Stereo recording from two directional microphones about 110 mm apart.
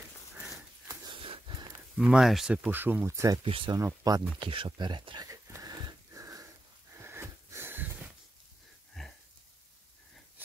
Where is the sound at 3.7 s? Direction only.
35° right (ahead or behind).